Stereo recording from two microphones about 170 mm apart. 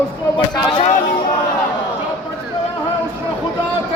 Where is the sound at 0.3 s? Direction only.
30° left (ahead or behind).